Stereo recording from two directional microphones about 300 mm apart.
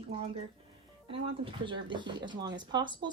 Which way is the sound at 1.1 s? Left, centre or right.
Centre.